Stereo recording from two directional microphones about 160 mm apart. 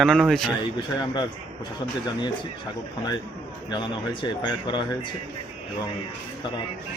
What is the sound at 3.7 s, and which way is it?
Speech, 30° left (ahead or behind).